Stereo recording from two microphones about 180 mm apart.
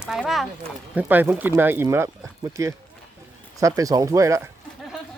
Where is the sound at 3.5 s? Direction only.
20° right (ahead or behind).